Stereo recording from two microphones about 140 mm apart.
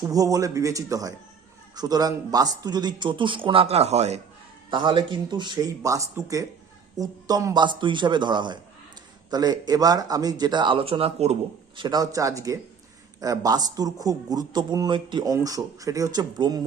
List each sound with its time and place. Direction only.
0.0 s a man's voice: 25° right (ahead or behind); by 4.2 s 50° right (ahead or behind)
4.7 s a man's voice: 35° right (ahead or behind)
11.8 s a man's voice: 30° right (ahead or behind)